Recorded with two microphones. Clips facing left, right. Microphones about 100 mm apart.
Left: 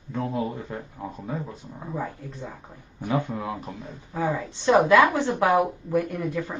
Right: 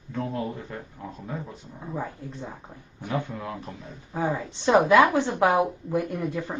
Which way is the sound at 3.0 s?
20° left (ahead or behind).